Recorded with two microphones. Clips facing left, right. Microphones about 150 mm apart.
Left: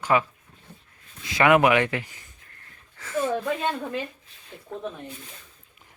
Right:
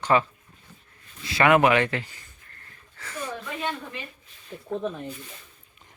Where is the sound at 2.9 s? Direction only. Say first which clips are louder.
Left 8 dB; 20° left (ahead or behind).